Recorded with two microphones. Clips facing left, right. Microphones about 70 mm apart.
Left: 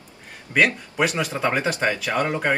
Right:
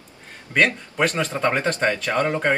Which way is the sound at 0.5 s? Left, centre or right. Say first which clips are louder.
Even; centre.